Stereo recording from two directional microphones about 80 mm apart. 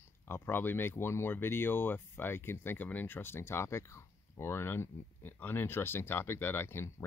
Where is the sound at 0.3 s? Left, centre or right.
Left.